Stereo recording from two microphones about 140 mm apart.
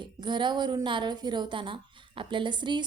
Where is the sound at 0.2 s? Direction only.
35° right (ahead or behind).